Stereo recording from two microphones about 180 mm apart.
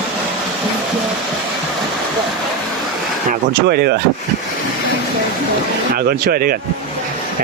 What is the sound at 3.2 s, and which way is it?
Speech, 65° right (ahead or behind).